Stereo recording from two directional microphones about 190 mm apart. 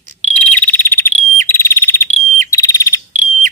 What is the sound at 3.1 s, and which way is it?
Bird, 45° right (ahead or behind).